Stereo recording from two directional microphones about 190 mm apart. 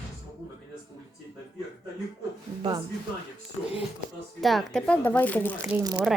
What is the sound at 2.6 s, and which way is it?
Speech, 20° right (ahead or behind).